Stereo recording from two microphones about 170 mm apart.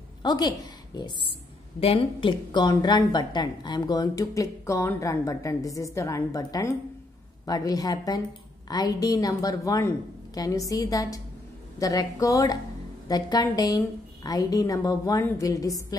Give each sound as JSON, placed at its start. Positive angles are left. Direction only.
{"t": 0.2, "sound": "a woman's voice", "side_deg": 25}